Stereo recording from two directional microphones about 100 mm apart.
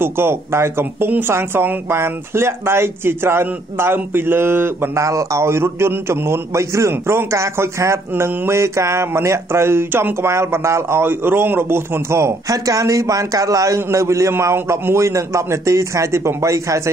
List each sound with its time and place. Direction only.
0.0 s speech: 25° right (ahead or behind)